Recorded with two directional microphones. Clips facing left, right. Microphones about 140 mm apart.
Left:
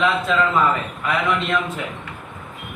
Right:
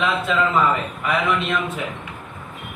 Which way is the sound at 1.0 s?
Centre (ahead or behind).